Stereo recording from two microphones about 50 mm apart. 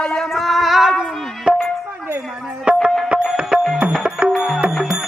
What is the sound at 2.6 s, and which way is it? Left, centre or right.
Music, right.